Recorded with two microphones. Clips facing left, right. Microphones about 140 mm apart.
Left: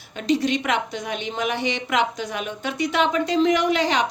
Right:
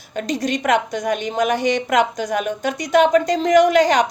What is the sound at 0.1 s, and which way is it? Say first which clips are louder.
A woman's voice: left 1 dB; 45° right (ahead or behind).